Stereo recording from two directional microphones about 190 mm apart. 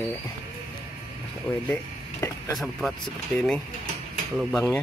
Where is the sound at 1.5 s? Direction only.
Centre (ahead or behind).